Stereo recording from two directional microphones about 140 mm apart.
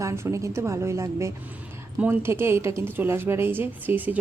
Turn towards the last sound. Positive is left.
turn(degrees=-10)  # may be behind; listen again after turning